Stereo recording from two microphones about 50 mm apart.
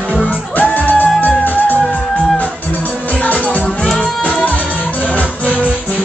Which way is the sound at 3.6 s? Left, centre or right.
Centre.